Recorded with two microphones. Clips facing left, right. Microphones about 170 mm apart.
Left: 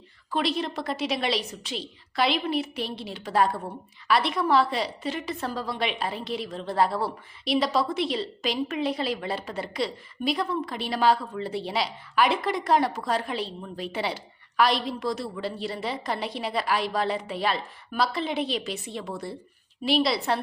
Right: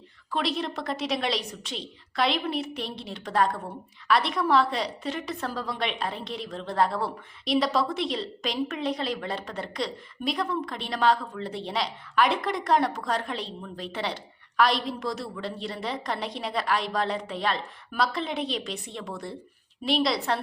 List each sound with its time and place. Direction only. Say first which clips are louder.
0.3 s a woman's voice: left 2 dB; centre (ahead or behind)